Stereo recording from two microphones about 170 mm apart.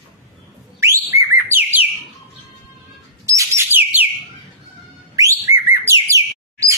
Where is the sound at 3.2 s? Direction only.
20° right (ahead or behind).